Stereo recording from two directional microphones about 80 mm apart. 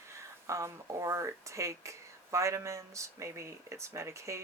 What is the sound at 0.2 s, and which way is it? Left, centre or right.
Speech, right.